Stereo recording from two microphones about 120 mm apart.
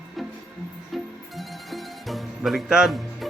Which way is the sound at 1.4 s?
Centre (ahead or behind).